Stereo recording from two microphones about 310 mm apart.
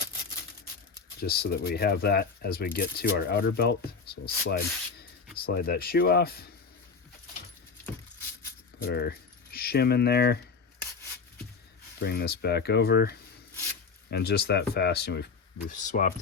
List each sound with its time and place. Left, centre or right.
1.2 s speech: left
8.8 s speech: left
11.9 s speech: left